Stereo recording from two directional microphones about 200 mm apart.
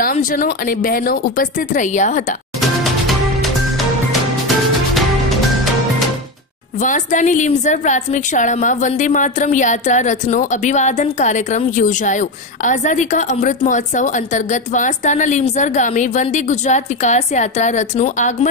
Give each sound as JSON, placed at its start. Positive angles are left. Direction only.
{"t": 0.0, "sound": "speech", "side_deg": 40}
{"t": 2.8, "sound": "music", "side_deg": 0}
{"t": 6.8, "sound": "a woman's voice", "side_deg": 40}